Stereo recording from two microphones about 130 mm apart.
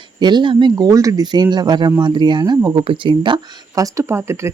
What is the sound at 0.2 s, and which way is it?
Speech, 35° right (ahead or behind).